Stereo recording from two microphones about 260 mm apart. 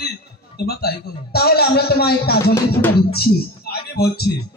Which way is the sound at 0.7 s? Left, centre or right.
Left.